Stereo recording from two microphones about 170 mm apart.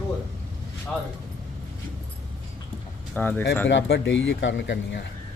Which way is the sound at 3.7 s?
90° left.